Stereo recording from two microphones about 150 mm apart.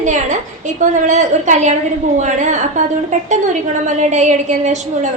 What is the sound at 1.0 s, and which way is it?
A woman's voice, 55° right (ahead or behind).